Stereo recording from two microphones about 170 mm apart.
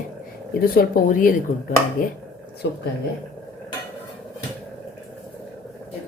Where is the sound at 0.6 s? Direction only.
60° left (ahead or behind).